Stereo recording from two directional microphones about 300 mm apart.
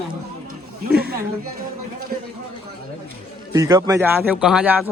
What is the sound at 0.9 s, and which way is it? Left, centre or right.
Speech, right.